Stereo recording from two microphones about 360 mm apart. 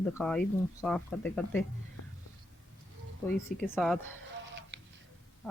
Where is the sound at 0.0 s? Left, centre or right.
Centre.